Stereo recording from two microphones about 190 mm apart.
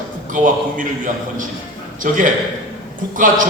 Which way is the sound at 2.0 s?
45° right (ahead or behind).